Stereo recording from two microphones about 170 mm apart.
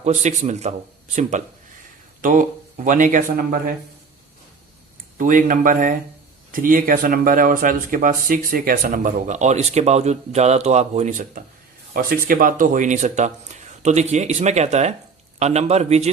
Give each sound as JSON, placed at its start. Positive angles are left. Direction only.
{"t": 0.0, "sound": "speech", "side_deg": -45}
{"t": 2.2, "sound": "speech", "side_deg": -50}
{"t": 5.1, "sound": "speech", "side_deg": -50}
{"t": 11.9, "sound": "a man's voice", "side_deg": -55}